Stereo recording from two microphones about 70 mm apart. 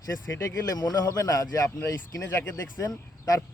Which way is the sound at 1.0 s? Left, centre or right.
Left.